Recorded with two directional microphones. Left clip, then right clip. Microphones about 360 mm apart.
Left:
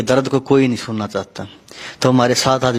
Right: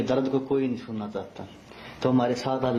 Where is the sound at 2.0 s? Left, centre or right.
Left.